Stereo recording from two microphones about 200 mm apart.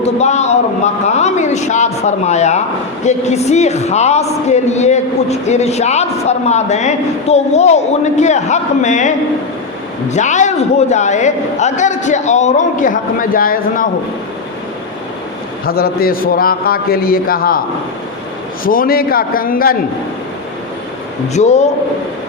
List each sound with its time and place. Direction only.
0.0 s a man's voice: 35° left (ahead or behind)
15.6 s a man's voice: 50° left (ahead or behind)
18.6 s a man's voice: 45° left (ahead or behind)
21.3 s a woman's voice: 35° left (ahead or behind)